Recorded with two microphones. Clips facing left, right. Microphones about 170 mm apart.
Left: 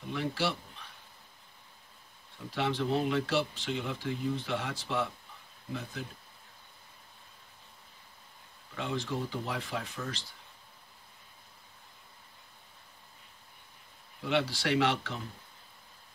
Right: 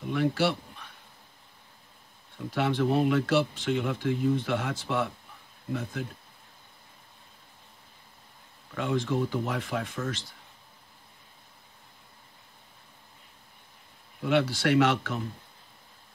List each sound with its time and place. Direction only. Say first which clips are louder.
0.1 s a sound: right 6 dB; 55° right (ahead or behind)
2.5 s speech: right 5 dB; 50° right (ahead or behind)
8.7 s speech: right 6 dB; 50° right (ahead or behind)
14.2 s speech: right 5 dB; 50° right (ahead or behind)